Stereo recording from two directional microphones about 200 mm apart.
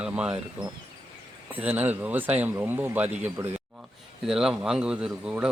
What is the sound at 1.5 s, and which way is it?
Speech, 10° right (ahead or behind).